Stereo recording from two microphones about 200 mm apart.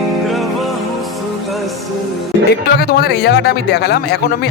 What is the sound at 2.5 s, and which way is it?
A man's voice, 55° left (ahead or behind).